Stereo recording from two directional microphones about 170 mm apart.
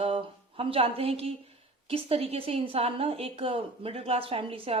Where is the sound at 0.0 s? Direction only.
35° right (ahead or behind).